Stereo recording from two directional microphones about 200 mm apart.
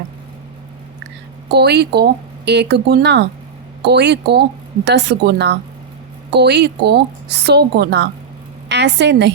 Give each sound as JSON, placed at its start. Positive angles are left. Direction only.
{"t": 1.5, "sound": "a woman's voice", "side_deg": -55}